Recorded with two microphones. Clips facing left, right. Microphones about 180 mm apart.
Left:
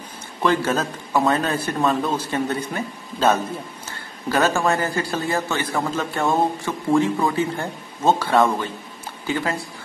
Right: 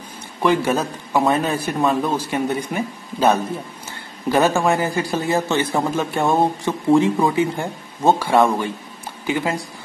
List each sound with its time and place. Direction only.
0.4 s a man's voice: 15° right (ahead or behind)